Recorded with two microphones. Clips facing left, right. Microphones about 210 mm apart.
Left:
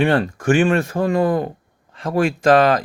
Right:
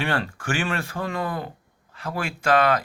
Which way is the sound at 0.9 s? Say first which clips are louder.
Left 11 dB; 35° left (ahead or behind).